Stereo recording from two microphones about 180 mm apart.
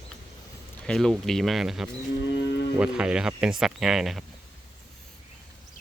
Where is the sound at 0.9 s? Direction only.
Centre (ahead or behind).